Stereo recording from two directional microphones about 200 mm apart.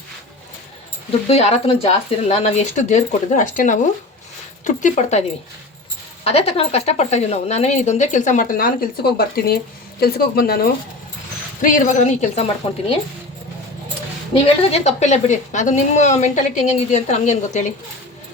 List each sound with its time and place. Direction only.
1.3 s a woman's voice: 30° left (ahead or behind)
6.2 s a woman's voice: 30° left (ahead or behind); by 10.7 s 50° left (ahead or behind)
11.6 s a woman's voice: 35° left (ahead or behind)
14.3 s a woman's voice: 30° left (ahead or behind)